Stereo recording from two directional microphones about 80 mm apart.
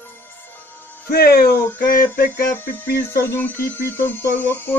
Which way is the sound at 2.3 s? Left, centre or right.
Left.